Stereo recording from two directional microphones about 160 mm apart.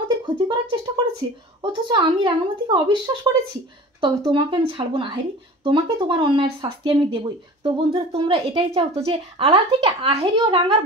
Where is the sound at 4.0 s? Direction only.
30° right (ahead or behind).